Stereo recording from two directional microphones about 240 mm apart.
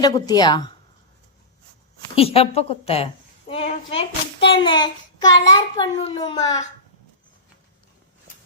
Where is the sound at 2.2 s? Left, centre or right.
Left.